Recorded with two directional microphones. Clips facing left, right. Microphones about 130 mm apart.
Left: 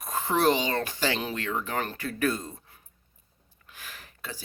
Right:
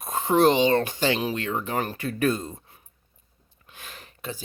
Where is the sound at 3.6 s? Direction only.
25° right (ahead or behind).